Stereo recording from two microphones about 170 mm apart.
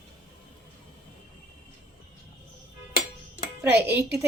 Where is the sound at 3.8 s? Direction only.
15° right (ahead or behind).